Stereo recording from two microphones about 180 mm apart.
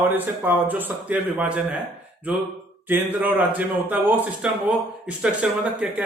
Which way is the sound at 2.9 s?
10° right (ahead or behind).